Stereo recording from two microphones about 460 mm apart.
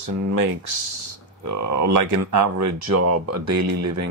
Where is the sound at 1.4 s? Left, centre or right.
Right.